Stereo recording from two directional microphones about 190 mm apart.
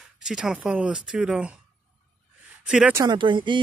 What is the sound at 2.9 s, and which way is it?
Speech, 20° right (ahead or behind).